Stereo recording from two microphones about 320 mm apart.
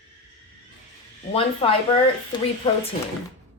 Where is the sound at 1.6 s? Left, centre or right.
Centre.